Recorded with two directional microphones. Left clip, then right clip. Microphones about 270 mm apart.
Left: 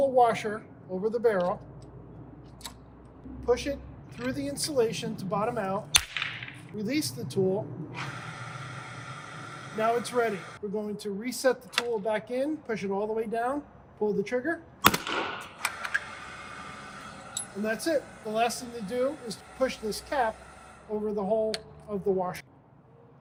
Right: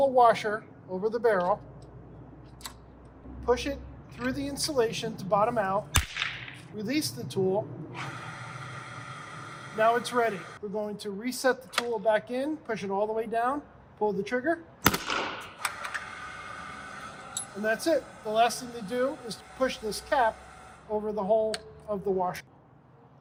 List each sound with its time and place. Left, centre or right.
0.0 s speech: centre
3.4 s speech: centre
6.2 s whip: right
6.7 s speech: centre
7.9 s gasp: centre
9.7 s speech: centre
15.6 s camera: centre
17.6 s speech: centre